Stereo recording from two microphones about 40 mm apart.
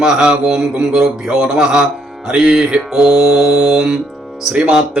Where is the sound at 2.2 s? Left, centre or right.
Right.